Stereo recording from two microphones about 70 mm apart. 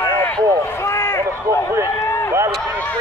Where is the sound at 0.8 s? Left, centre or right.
Left.